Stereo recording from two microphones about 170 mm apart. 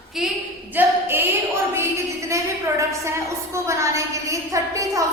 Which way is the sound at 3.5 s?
15° right (ahead or behind).